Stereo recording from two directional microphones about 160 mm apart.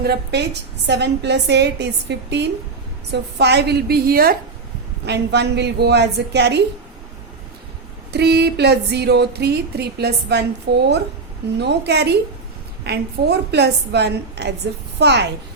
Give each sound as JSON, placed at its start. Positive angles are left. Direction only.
{"t": 0.0, "sound": "a woman's voice", "side_deg": -90}
{"t": 5.0, "sound": "speech", "side_deg": -90}
{"t": 8.1, "sound": "speech", "side_deg": -90}
{"t": 13.5, "sound": "speech", "side_deg": -90}